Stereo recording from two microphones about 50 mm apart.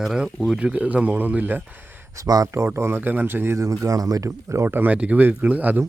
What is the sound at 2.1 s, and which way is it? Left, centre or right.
Speech, right.